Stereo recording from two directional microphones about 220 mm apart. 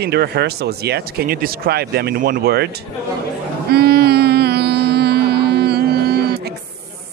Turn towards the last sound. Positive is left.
turn(degrees=-45)  # may be behind; listen again after turning